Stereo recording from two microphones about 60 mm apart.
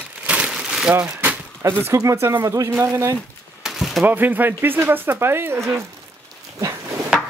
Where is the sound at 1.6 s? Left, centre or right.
Right.